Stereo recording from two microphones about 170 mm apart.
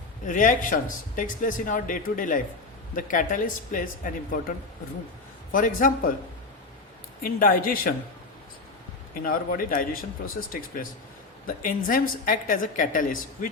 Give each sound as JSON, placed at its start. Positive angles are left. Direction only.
{"t": 0.3, "sound": "speech", "side_deg": 50}
{"t": 7.2, "sound": "speech", "side_deg": 55}
{"t": 9.2, "sound": "speech", "side_deg": 55}